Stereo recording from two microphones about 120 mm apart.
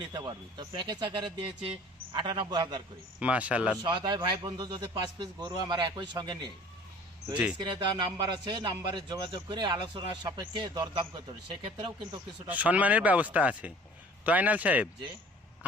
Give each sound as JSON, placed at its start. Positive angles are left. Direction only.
{"t": 0.1, "sound": "speech", "side_deg": -40}
{"t": 3.2, "sound": "speech", "side_deg": -10}
{"t": 3.8, "sound": "speech", "side_deg": -40}
{"t": 7.6, "sound": "speech", "side_deg": -40}
{"t": 12.5, "sound": "speech", "side_deg": -10}